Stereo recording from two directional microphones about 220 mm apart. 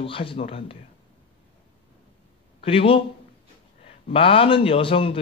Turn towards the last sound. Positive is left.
turn(degrees=25)  # may be behind; listen again after turning